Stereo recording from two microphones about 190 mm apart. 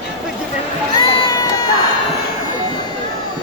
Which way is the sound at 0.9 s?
20° left (ahead or behind).